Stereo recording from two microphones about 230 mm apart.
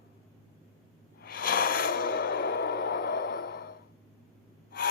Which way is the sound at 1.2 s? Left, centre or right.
Left.